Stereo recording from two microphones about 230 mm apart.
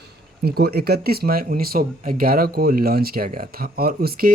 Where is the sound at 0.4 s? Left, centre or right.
Right.